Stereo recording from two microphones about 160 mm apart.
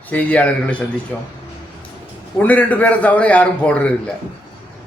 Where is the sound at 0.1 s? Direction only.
10° left (ahead or behind).